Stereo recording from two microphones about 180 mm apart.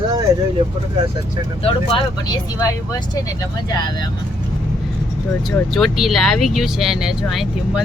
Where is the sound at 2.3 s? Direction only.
20° left (ahead or behind).